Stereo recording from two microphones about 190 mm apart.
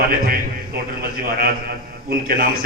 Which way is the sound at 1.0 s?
50° right (ahead or behind).